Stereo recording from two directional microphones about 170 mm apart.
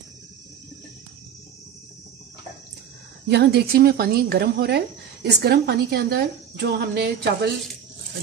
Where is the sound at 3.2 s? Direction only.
75° right (ahead or behind).